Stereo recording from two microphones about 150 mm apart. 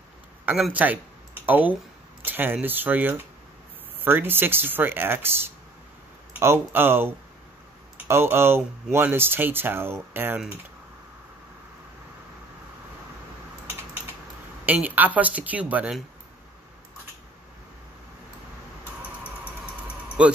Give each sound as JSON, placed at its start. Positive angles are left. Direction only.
{"t": 0.5, "sound": "speech", "side_deg": -5}
{"t": 14.7, "sound": "speech", "side_deg": -10}
{"t": 20.2, "sound": "speech", "side_deg": -5}